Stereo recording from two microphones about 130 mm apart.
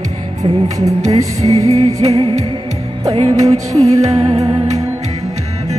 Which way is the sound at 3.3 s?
25° right (ahead or behind).